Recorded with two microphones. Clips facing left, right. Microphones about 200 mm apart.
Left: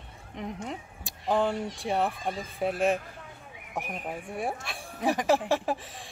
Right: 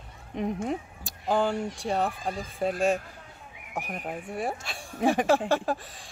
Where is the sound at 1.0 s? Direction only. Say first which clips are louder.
Left 1 dB; centre (ahead or behind).